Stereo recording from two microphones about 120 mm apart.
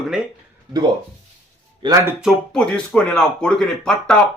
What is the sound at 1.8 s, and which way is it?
Speech, 40° right (ahead or behind).